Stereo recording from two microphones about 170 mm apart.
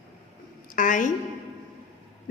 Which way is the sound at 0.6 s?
50° left (ahead or behind).